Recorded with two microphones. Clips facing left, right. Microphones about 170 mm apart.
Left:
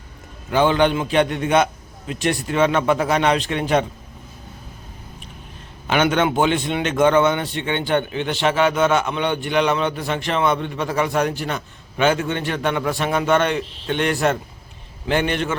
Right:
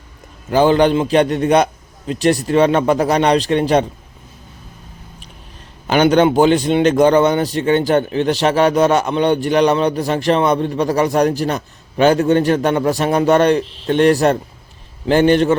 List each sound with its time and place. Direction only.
0.5 s a man's voice: 35° right (ahead or behind)
5.9 s a man's voice: 35° right (ahead or behind)